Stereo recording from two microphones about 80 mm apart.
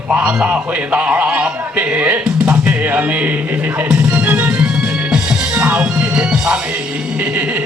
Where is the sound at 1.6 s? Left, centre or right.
Centre.